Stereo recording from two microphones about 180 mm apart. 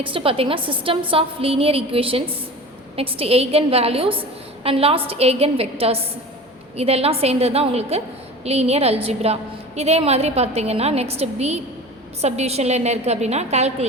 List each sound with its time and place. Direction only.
0.0 s a woman's voice: 30° right (ahead or behind)